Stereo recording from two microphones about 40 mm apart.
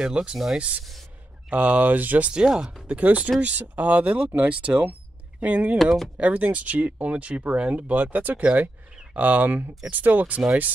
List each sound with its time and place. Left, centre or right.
0.0 s speech: right
2.3 s speech: centre
2.9 s speech: right
7.9 s speech: right